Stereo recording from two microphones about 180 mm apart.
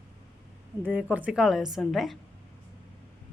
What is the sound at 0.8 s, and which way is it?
Speech, 10° right (ahead or behind).